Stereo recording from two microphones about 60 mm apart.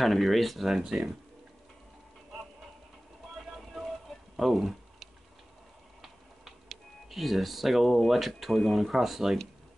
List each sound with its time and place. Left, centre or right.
0.0 s speech: centre
3.4 s a sound: centre
6.0 s speech: centre